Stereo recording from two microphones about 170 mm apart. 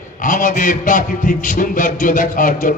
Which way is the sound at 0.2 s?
50° left (ahead or behind).